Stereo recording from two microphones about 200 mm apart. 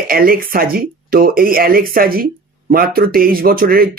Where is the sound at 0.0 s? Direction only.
45° right (ahead or behind).